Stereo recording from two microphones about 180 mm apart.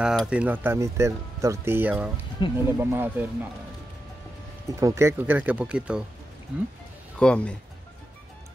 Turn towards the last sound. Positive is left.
turn(degrees=5)  # may be behind; listen again after turning